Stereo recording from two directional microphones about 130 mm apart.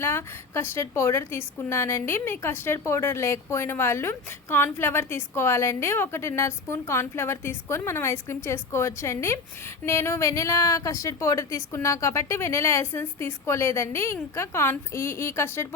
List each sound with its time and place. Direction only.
0.0 s a woman's voice: 20° left (ahead or behind)